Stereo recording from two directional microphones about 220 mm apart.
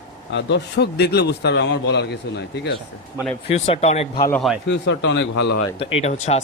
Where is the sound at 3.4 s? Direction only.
25° left (ahead or behind).